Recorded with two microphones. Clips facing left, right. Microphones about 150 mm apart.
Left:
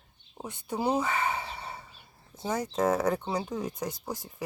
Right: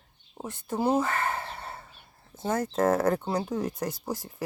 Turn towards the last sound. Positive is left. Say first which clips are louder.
# right 3 dB
turn(degrees=-5)  # may be behind; listen again after turning